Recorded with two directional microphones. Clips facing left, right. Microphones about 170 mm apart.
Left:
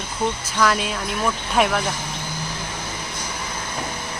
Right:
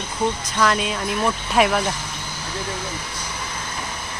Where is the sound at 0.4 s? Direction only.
Centre (ahead or behind).